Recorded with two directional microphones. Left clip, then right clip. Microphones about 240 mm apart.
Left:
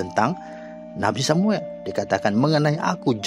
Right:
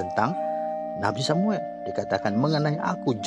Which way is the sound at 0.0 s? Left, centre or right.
Centre.